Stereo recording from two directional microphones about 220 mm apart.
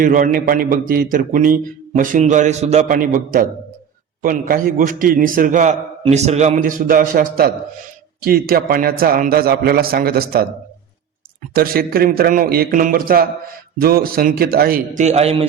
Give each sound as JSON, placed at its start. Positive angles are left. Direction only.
{"t": 0.0, "sound": "a man's voice", "side_deg": -40}
{"t": 11.5, "sound": "a man's voice", "side_deg": -40}